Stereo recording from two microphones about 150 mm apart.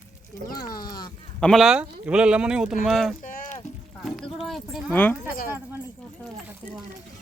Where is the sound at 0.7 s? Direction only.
25° left (ahead or behind).